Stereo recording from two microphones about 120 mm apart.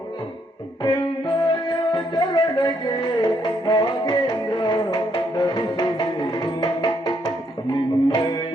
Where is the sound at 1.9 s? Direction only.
35° left (ahead or behind).